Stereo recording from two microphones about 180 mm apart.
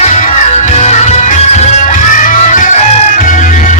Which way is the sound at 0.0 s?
40° left (ahead or behind).